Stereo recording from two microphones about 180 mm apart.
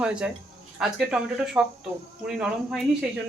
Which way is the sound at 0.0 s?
5° right (ahead or behind).